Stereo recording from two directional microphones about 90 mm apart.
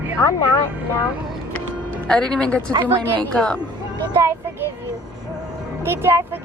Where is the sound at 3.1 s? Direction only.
15° left (ahead or behind).